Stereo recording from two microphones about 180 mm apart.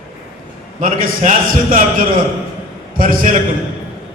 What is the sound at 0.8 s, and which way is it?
A man's voice, 45° right (ahead or behind).